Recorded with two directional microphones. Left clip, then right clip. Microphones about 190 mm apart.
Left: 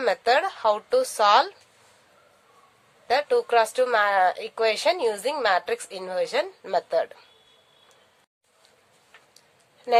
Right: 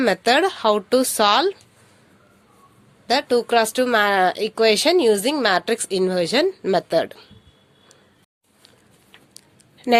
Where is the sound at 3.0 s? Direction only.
45° right (ahead or behind).